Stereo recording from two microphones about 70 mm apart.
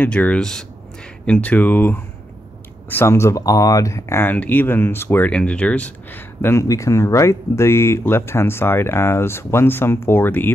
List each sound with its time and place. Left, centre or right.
0.0 s speech: centre; by 3.4 s left
3.4 s speech: left
4.2 s speech: left
5.3 s speech: centre
6.4 s speech: left